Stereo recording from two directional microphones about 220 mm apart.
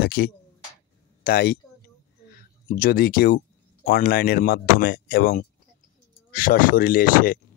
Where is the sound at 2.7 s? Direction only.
40° left (ahead or behind).